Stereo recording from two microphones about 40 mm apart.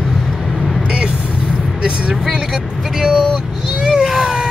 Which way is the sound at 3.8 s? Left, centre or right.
Centre.